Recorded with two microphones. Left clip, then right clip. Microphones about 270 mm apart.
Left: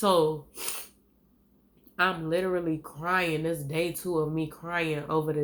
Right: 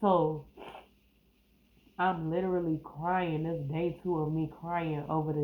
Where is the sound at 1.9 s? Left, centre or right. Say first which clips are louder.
Left 4 dB; left.